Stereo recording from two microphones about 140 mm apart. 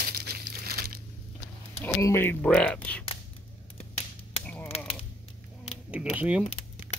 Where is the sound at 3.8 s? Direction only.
45° left (ahead or behind).